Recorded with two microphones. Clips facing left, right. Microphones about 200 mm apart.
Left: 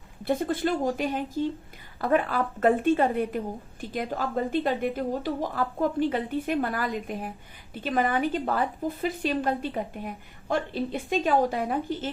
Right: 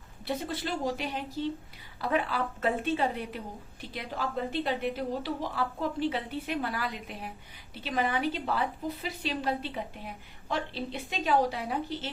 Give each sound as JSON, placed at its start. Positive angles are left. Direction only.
{"t": 0.3, "sound": "a woman's voice", "side_deg": 50}